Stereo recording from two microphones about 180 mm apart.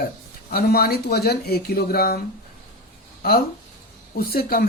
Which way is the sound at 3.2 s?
55° left (ahead or behind).